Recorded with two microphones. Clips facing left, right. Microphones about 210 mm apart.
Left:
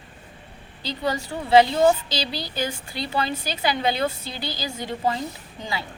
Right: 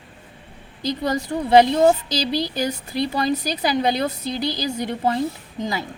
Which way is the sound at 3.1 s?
40° right (ahead or behind).